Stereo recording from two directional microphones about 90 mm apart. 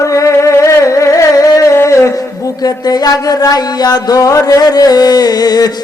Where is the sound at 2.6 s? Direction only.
50° left (ahead or behind).